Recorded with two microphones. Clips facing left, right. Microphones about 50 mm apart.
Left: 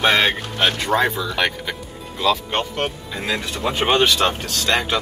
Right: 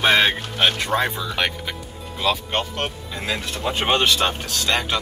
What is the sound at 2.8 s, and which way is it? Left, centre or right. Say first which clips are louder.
Speech: left 3 dB; centre.